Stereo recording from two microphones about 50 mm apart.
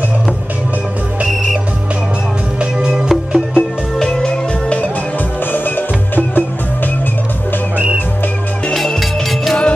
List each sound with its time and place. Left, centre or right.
1.2 s whistle: centre
2.6 s music: centre
3.3 s music: centre
4.1 s music: centre
5.5 s music: left
7.7 s music: right